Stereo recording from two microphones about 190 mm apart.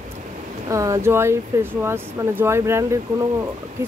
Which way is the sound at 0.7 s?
15° right (ahead or behind).